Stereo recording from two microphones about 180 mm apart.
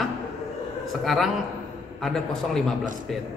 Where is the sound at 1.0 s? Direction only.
Centre (ahead or behind).